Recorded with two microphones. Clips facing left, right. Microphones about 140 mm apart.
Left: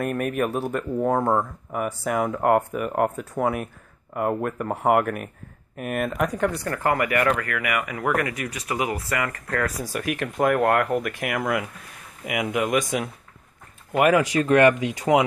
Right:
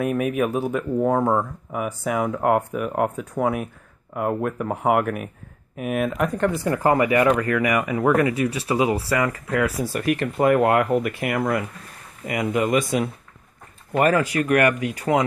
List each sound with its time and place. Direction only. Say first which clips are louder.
0.0 s speech: right 3 dB; centre (ahead or behind)
6.7 s speech: right 7 dB; 20° right (ahead or behind)
9.3 s speech: right 4 dB; 10° right (ahead or behind)
9.9 s speech: right 2 dB; centre (ahead or behind)
13.9 s speech: even; 10° left (ahead or behind)
14.3 s speech: left 2 dB; 25° left (ahead or behind)